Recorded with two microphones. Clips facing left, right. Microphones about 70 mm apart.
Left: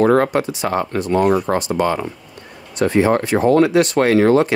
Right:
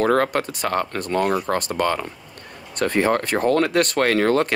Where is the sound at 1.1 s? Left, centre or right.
Left.